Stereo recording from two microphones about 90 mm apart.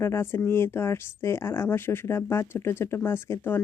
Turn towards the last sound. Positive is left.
turn(degrees=30)  # may be behind; listen again after turning